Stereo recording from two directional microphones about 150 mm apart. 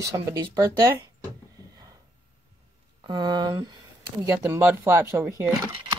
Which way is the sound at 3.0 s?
30° right (ahead or behind).